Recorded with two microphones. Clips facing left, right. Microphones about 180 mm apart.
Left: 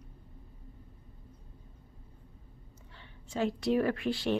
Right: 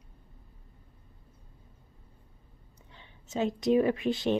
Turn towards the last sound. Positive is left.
turn(degrees=-20)  # may be behind; listen again after turning